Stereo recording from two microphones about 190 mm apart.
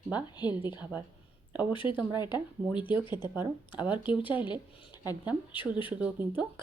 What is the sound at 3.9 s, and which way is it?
Speech, 25° left (ahead or behind).